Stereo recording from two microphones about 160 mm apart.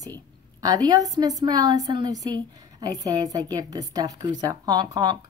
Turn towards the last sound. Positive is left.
turn(degrees=-25)  # may be behind; listen again after turning